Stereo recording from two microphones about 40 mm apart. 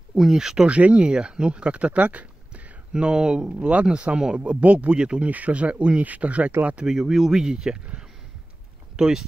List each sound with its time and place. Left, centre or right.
0.2 s speech: centre
0.7 s speech: right
2.9 s speech: right
4.1 s speech: right
5.2 s speech: right
6.9 s speech: centre
8.9 s speech: centre